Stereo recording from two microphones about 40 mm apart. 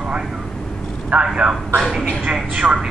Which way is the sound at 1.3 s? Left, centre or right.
Right.